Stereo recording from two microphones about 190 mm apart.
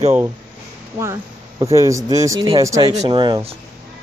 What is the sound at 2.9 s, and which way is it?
Speech, 35° right (ahead or behind).